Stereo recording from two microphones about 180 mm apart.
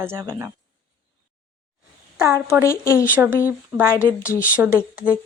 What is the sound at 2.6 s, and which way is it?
Speech, 15° left (ahead or behind).